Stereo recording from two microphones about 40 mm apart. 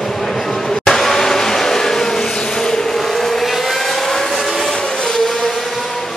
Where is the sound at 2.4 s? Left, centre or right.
Centre.